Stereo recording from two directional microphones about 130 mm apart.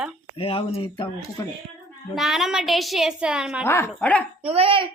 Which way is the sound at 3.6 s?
20° left (ahead or behind).